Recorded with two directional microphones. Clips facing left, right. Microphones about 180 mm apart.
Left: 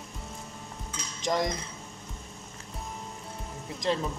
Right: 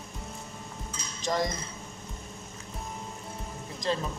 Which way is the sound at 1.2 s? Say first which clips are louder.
Left 1 dB; 20° left (ahead or behind).